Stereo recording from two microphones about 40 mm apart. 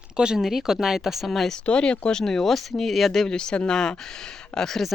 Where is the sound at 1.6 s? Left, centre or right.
Left.